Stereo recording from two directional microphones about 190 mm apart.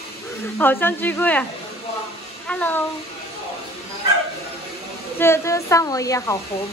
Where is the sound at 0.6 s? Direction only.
10° left (ahead or behind).